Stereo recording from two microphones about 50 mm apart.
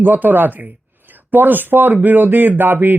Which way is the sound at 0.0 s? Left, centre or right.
Right.